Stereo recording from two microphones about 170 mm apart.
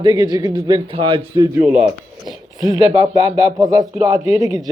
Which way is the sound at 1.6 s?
5° right (ahead or behind).